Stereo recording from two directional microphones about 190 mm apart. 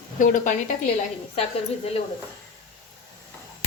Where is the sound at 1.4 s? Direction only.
30° left (ahead or behind).